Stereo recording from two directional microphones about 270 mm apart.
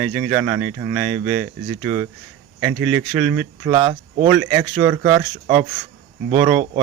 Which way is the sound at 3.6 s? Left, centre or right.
Centre.